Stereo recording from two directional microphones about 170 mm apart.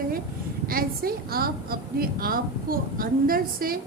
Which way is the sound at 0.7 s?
60° right (ahead or behind).